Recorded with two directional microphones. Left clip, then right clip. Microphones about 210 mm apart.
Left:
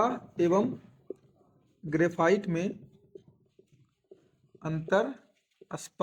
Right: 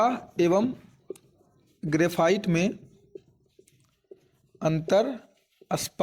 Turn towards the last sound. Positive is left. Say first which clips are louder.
# right 11 dB
turn(degrees=-45)  # may be behind; listen again after turning